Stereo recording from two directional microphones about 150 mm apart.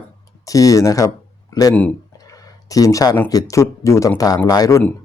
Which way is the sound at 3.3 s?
20° left (ahead or behind).